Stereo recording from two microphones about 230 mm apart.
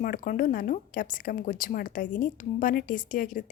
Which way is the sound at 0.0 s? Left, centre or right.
Left.